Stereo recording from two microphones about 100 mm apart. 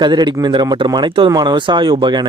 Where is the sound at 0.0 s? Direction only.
45° right (ahead or behind).